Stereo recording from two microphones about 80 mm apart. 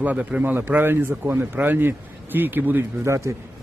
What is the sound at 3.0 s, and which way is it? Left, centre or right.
Speech, right.